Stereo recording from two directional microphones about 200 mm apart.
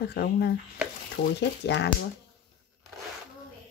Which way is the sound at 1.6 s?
60° left (ahead or behind).